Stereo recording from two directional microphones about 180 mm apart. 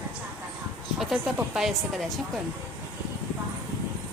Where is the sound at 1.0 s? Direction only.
Centre (ahead or behind).